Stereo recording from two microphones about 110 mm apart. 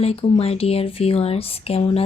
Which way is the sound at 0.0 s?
65° left (ahead or behind).